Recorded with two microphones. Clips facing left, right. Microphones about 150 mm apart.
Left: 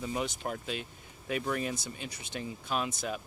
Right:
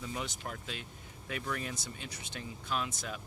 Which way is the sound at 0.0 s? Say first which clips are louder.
Left 6 dB; 20° left (ahead or behind).